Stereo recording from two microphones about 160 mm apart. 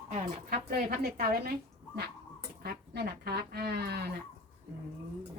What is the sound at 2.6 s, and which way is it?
Speech, 85° right.